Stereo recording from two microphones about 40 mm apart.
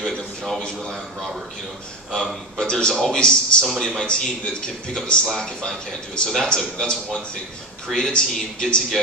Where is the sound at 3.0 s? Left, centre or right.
Centre.